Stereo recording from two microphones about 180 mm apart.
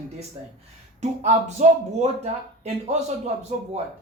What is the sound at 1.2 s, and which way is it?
Speech, 40° right (ahead or behind).